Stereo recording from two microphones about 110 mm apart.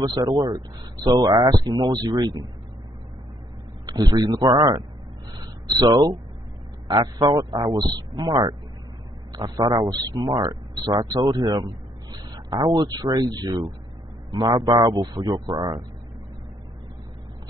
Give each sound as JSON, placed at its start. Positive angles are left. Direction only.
{"t": 0.0, "sound": "speech", "side_deg": -30}
{"t": 3.8, "sound": "speech", "side_deg": -35}
{"t": 5.4, "sound": "a sound", "side_deg": -40}
{"t": 6.9, "sound": "a man's voice", "side_deg": -35}